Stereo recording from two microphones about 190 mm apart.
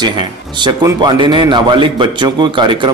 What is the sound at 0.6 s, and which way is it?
A man's voice, 25° right (ahead or behind).